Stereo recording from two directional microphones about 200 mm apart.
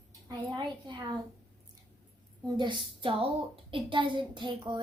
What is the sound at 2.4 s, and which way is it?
Child singing, 25° right (ahead or behind).